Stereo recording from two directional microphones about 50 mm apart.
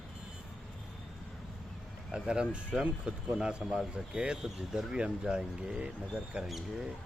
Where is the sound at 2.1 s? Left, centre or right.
Centre.